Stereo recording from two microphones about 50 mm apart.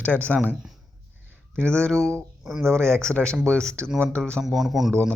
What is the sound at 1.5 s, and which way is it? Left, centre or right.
Speech, left.